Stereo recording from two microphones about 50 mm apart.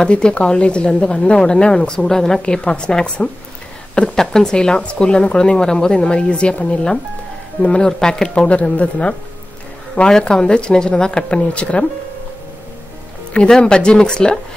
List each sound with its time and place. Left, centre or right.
0.0 s a woman's voice: centre
8.5 s a woman's voice: left
10.0 s speech: centre
13.6 s speech: centre